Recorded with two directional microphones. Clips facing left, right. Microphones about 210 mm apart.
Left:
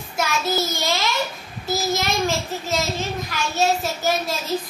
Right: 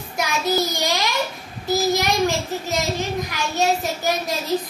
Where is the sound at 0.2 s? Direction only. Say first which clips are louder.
Right 1 dB; 15° right (ahead or behind).